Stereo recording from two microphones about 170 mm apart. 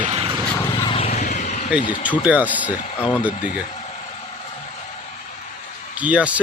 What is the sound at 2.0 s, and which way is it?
Speech, 10° right (ahead or behind).